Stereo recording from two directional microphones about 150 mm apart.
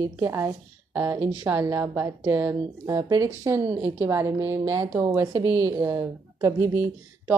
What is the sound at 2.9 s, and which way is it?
A woman's voice, 25° right (ahead or behind).